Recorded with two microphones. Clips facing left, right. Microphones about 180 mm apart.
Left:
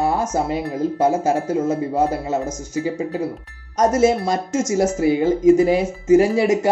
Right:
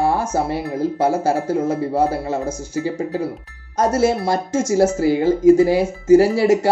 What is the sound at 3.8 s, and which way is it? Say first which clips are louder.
Speech: left 1 dB; 20° left (ahead or behind).